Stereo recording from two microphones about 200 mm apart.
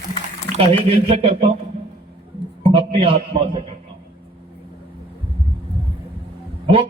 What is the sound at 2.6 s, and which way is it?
Speech, 30° right (ahead or behind).